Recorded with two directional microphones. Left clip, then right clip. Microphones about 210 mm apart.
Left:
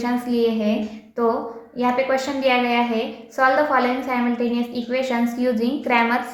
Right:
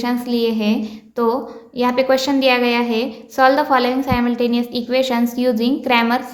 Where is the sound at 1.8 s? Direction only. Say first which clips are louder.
Right 4 dB; 50° right (ahead or behind).